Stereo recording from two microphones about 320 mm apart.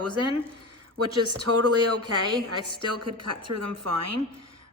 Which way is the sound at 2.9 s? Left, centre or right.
Right.